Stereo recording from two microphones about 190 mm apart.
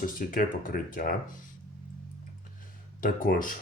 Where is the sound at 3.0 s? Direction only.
45° left (ahead or behind).